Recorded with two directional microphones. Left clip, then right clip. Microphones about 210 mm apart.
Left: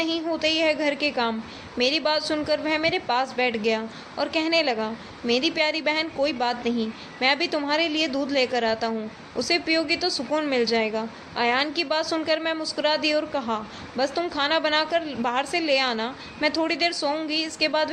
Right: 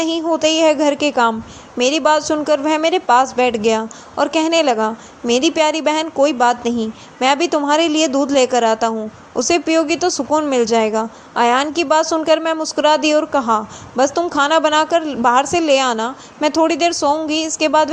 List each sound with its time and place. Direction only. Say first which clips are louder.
0.0 s a woman's voice: right 8 dB; 30° right (ahead or behind)